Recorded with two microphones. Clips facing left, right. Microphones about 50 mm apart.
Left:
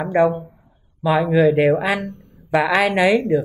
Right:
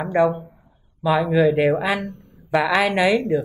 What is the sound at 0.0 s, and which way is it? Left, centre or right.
Speech, centre.